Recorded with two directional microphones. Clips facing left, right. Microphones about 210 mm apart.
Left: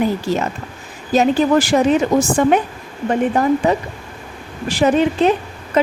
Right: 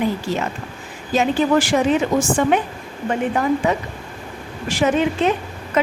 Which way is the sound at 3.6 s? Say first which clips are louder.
Left 3 dB; 35° left (ahead or behind).